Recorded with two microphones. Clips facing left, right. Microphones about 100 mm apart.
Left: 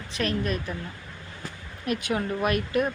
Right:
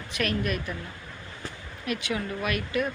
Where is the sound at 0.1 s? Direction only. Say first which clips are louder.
Left 1 dB; 30° left (ahead or behind).